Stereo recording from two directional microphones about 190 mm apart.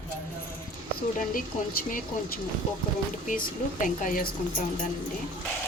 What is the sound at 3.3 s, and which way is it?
Speech, 45° left (ahead or behind).